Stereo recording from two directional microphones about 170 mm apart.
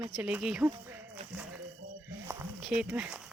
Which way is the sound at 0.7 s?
10° right (ahead or behind).